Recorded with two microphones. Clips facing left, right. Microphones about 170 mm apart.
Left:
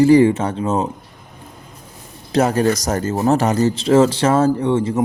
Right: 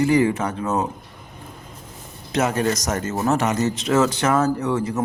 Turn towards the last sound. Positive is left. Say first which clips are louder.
# left 5 dB
turn(degrees=25)  # may be behind; listen again after turning